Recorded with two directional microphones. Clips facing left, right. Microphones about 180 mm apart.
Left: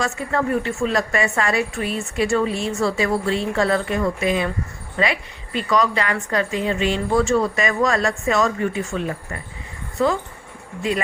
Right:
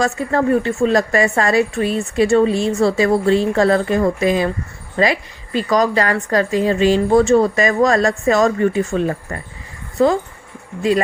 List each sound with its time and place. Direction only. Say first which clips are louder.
0.0 s a woman's voice: right 5 dB; 35° right (ahead or behind)